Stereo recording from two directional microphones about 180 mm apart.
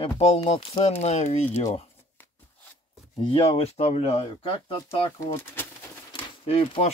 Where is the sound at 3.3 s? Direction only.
30° left (ahead or behind).